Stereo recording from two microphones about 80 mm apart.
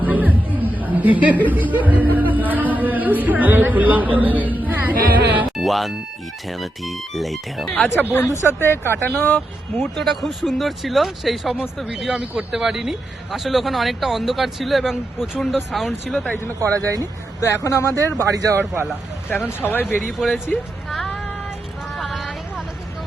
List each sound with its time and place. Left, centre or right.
0.0 s chatter: right
0.8 s a sound: right
1.5 s a woman's voice: right
5.5 s speech: centre
8.4 s speech: left
9.8 s speech: centre
12.5 s speech: centre
16.6 s speech: right
17.4 s speech: left
18.2 s speech: right
19.3 s speech: left
20.0 s speech: centre
21.9 s vehicle: centre